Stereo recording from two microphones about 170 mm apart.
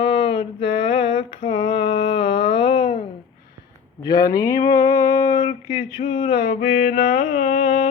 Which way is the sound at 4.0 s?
20° left (ahead or behind).